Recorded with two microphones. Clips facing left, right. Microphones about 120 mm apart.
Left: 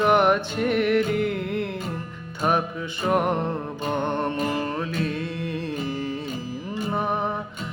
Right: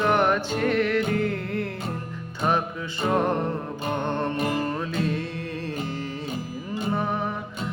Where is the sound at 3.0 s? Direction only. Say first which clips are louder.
Left 1 dB; 15° left (ahead or behind).